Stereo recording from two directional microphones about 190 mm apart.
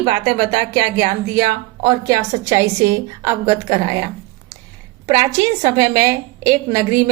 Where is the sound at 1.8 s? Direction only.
15° right (ahead or behind).